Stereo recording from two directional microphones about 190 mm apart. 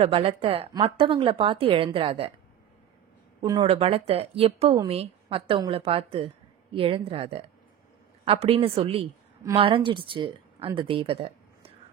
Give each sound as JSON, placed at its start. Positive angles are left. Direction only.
{"t": 0.0, "sound": "a woman's voice", "side_deg": -30}
{"t": 3.6, "sound": "a woman's voice", "side_deg": -30}